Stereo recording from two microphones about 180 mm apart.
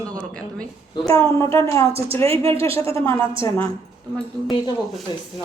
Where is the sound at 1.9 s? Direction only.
35° right (ahead or behind).